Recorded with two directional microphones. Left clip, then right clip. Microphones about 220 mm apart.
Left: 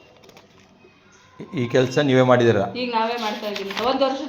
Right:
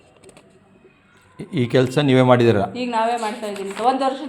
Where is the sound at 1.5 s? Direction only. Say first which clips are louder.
Right 1 dB; 50° right (ahead or behind).